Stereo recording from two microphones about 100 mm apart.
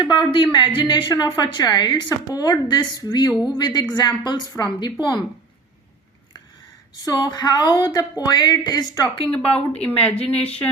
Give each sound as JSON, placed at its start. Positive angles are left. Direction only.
{"t": 0.0, "sound": "speech", "side_deg": 55}
{"t": 7.0, "sound": "speech", "side_deg": 45}
{"t": 9.3, "sound": "speech", "side_deg": 10}